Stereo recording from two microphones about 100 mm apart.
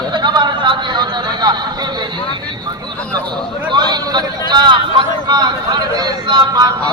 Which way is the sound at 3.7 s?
45° right (ahead or behind).